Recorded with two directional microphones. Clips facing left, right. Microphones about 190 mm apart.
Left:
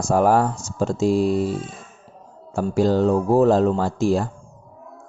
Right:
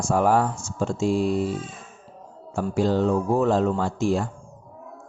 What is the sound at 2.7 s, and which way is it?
Speech, 40° left (ahead or behind).